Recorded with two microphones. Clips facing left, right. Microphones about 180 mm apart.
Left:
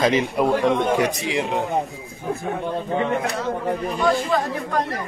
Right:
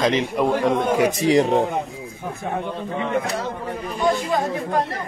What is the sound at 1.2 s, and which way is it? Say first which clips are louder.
Speech: right 7 dB; 40° right (ahead or behind).